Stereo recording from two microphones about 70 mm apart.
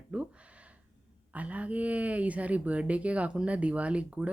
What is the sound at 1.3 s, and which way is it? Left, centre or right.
Speech, centre.